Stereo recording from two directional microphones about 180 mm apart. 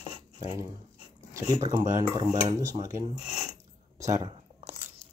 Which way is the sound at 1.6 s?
20° right (ahead or behind).